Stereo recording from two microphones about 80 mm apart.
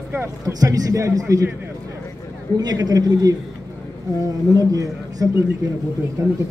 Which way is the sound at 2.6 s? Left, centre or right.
Right.